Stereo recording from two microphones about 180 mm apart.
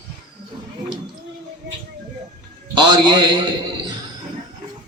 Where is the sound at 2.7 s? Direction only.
25° right (ahead or behind).